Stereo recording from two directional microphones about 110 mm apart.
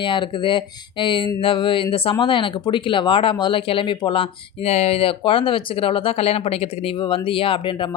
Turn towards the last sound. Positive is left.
turn(degrees=50)  # may be behind; listen again after turning